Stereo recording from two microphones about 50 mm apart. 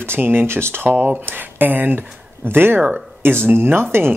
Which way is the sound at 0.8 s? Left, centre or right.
Right.